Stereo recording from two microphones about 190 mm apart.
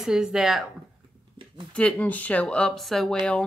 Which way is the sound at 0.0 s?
5° right (ahead or behind).